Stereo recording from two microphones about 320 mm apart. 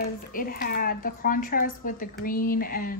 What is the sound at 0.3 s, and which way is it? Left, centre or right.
Speech, left.